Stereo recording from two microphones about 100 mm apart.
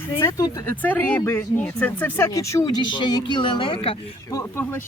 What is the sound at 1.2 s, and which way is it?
Speech, 30° left (ahead or behind).